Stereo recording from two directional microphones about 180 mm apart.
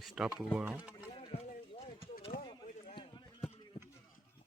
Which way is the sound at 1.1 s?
35° left (ahead or behind).